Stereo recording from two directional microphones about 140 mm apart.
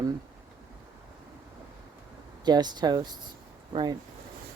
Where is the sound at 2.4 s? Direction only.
30° right (ahead or behind).